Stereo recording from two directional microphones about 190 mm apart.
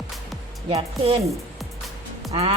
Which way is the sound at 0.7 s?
30° right (ahead or behind).